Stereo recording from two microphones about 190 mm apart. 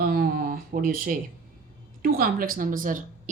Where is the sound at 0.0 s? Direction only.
50° right (ahead or behind).